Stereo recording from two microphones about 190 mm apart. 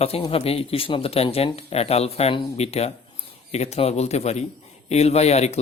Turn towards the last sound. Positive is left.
turn(degrees=35)  # may be behind; listen again after turning